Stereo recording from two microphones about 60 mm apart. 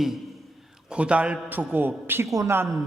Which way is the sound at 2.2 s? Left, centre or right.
Right.